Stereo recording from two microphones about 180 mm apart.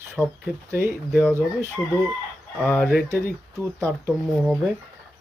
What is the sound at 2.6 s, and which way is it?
Speech, 10° left (ahead or behind).